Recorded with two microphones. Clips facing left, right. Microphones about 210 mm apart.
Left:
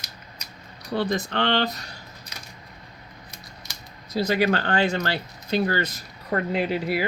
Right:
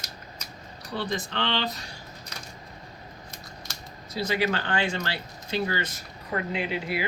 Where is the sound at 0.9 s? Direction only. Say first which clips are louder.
Left 6 dB; 45° left (ahead or behind).